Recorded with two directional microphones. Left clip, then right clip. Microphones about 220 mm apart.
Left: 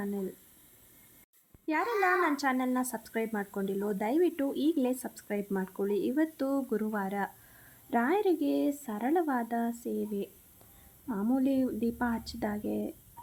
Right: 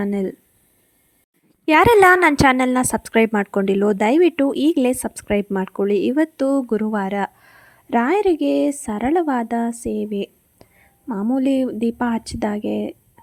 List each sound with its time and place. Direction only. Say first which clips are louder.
0.0 s a woman's voice: right 13 dB; 40° right (ahead or behind)
1.6 s a woman's voice: right 18 dB; 45° right (ahead or behind)